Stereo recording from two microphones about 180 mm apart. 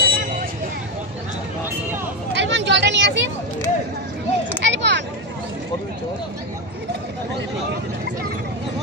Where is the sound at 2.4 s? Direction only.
80° right.